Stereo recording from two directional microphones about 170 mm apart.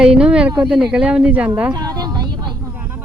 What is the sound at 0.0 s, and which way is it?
Speech, 5° right (ahead or behind).